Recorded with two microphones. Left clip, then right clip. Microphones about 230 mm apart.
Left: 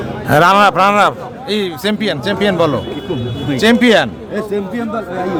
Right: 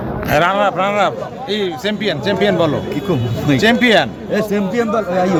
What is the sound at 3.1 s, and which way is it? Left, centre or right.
Speech, right.